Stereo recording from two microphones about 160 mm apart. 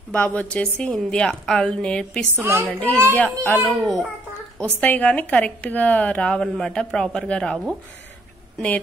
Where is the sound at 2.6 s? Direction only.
10° left (ahead or behind).